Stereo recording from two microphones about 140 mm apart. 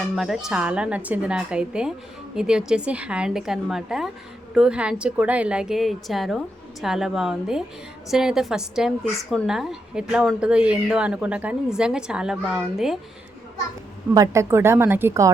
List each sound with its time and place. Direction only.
0.2 s a woman's voice: centre (ahead or behind)
14.1 s a woman's voice: 20° right (ahead or behind)